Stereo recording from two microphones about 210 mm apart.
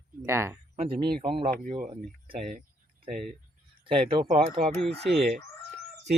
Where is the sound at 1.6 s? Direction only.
40° right (ahead or behind).